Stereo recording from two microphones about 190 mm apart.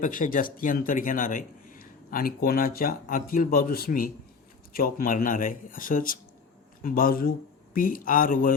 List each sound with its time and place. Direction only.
0.0 s a man's voice: 45° left (ahead or behind)